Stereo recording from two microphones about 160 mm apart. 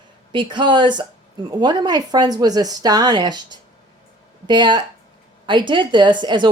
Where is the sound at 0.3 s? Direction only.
30° right (ahead or behind).